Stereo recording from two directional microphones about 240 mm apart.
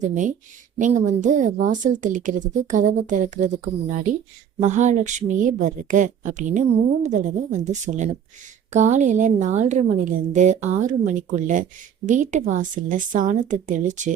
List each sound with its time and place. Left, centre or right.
0.0 s a woman's voice: right
4.6 s a woman's voice: right